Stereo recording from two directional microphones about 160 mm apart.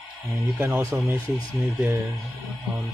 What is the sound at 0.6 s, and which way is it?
Speech, 15° right (ahead or behind).